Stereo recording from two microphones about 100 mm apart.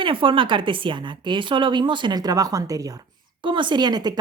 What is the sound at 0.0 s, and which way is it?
A woman's voice, 60° right (ahead or behind).